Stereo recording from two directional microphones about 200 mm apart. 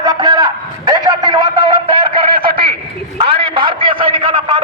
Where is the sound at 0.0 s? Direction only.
20° right (ahead or behind).